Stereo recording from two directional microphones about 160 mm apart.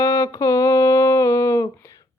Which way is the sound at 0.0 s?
20° left (ahead or behind).